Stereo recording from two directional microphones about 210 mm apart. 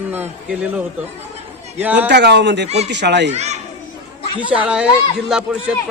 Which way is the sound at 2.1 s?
50° right (ahead or behind).